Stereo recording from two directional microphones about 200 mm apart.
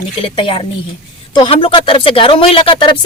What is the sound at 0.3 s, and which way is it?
Speech, 25° left (ahead or behind).